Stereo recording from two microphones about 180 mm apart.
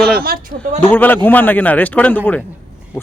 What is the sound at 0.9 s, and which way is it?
A man's voice, 10° left (ahead or behind).